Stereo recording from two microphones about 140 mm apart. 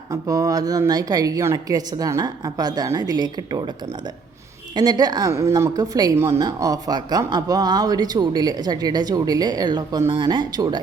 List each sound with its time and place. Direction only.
0.1 s speech: 25° right (ahead or behind)
4.7 s speech: 30° right (ahead or behind)